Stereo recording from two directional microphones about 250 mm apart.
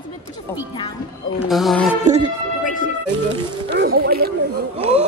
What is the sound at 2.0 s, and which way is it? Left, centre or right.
Speech, right.